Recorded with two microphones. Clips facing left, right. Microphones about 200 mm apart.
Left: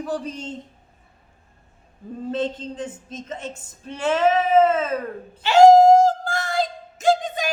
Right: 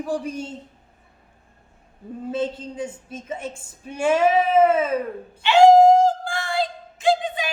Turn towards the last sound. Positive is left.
turn(degrees=45)  # may be behind; listen again after turning